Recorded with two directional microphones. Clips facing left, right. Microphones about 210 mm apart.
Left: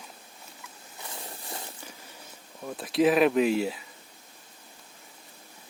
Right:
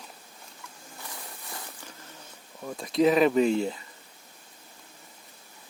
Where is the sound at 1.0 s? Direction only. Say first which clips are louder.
Left 3 dB; 25° left (ahead or behind).